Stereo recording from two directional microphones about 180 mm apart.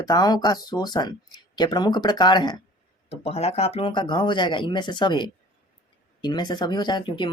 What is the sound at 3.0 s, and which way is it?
Speech, 35° left (ahead or behind).